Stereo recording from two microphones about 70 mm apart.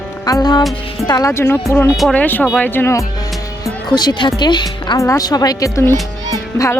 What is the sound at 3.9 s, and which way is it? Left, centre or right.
A woman's voice, left.